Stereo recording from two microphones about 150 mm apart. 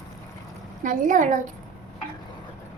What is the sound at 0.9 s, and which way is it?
Speech, 60° right (ahead or behind).